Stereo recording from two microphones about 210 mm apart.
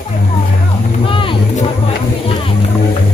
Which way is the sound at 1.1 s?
25° left (ahead or behind).